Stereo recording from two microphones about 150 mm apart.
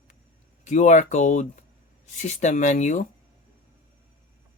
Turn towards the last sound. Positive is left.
turn(degrees=55)  # may be behind; listen again after turning